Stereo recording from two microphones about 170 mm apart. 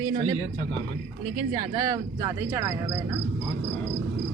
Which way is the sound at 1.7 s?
20° right (ahead or behind).